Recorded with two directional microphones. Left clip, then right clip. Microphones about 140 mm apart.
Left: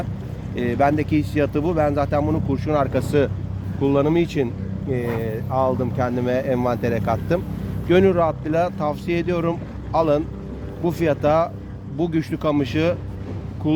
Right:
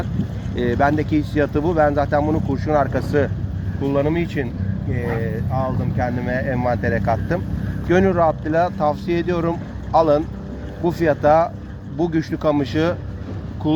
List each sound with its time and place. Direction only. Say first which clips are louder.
0.5 s speech: right 1 dB; 10° left (ahead or behind); by 3.2 s 25° left (ahead or behind)
3.8 s speech: left 1 dB; 50° left (ahead or behind); by 13.0 s 5° left (ahead or behind)
13.6 s speech: right 1 dB; 10° right (ahead or behind)